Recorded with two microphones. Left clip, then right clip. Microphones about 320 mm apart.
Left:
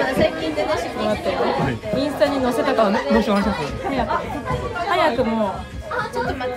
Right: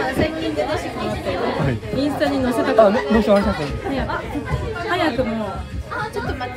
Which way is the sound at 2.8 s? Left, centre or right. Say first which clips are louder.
Right 7 dB; centre.